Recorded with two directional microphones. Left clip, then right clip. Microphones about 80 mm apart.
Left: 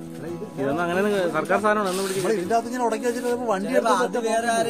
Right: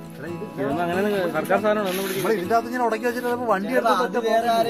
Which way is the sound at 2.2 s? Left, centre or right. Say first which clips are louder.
Right 2 dB; left.